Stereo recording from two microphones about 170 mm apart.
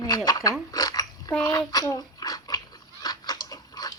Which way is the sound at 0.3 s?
20° left (ahead or behind).